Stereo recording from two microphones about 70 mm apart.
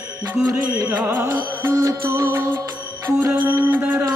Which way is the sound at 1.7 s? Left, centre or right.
Right.